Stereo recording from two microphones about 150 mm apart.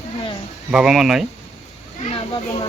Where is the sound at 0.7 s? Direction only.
5° right (ahead or behind).